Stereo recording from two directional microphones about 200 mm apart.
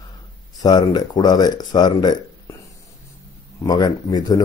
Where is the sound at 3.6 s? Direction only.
20° left (ahead or behind).